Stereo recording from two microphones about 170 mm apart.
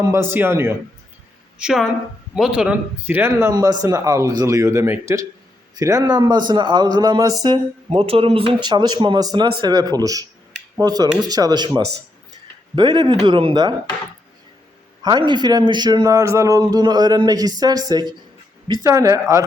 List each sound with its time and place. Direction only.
0.0 s a man's voice: 15° right (ahead or behind)
1.5 s a woman's voice: 5° right (ahead or behind); by 7.6 s 25° right (ahead or behind)
7.9 s a man's voice: 35° right (ahead or behind)
15.0 s a man's voice: 25° right (ahead or behind)